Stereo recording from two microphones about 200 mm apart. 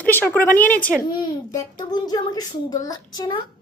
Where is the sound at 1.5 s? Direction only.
20° left (ahead or behind).